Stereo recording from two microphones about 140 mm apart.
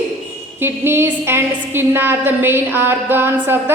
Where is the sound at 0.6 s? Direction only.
15° right (ahead or behind).